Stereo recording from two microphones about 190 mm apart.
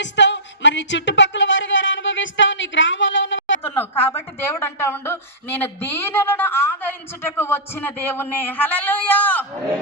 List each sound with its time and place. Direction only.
0.0 s speech: 70° left (ahead or behind)
4.0 s a woman's voice: 10° left (ahead or behind)